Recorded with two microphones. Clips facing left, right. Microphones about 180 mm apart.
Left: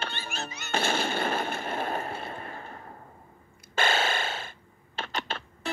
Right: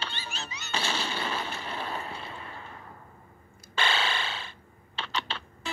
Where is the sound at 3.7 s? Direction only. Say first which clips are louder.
Left 3 dB; 45° left (ahead or behind).